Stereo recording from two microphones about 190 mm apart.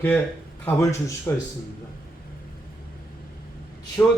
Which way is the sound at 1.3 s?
15° left (ahead or behind).